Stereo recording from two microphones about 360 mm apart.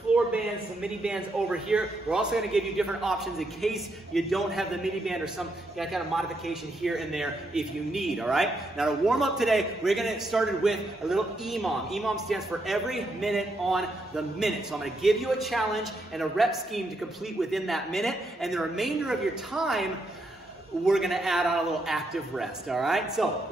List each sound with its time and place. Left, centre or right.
0.8 s a man's voice: centre